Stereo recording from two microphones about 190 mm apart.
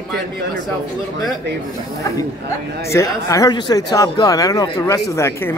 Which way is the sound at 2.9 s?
15° left (ahead or behind).